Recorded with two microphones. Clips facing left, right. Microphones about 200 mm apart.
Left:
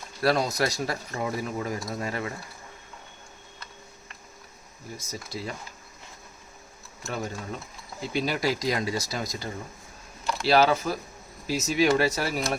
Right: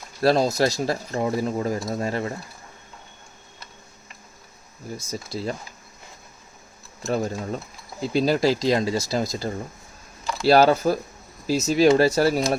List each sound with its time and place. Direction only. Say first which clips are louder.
0.2 s speech: right 5 dB; 30° right (ahead or behind)
4.9 s speech: right 5 dB; 30° right (ahead or behind)
7.0 s speech: right 8 dB; 40° right (ahead or behind)